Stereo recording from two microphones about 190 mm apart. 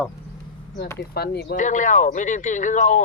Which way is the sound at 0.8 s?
55° left (ahead or behind).